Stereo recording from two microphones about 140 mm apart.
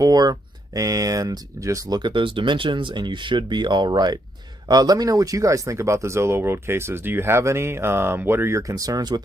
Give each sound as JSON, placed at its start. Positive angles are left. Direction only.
{"t": 0.0, "sound": "speech", "side_deg": -30}